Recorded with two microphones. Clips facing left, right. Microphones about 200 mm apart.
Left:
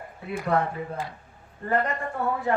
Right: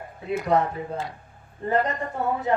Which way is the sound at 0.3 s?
20° right (ahead or behind).